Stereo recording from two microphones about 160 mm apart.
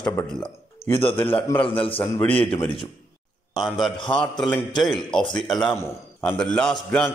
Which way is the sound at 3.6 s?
Centre (ahead or behind).